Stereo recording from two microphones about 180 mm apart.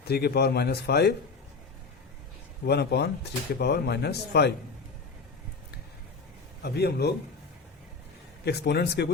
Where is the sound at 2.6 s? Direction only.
65° left (ahead or behind).